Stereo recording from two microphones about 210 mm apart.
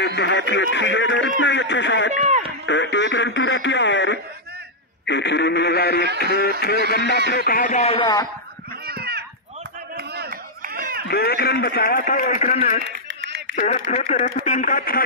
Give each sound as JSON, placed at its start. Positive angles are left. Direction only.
{"t": 0.0, "sound": "a man's voice", "side_deg": 55}
{"t": 8.8, "sound": "children playing", "side_deg": -50}
{"t": 9.9, "sound": "a sound", "side_deg": -45}
{"t": 11.1, "sound": "a man's voice", "side_deg": 50}
{"t": 12.8, "sound": "a sound", "side_deg": -55}
{"t": 13.6, "sound": "speech", "side_deg": 40}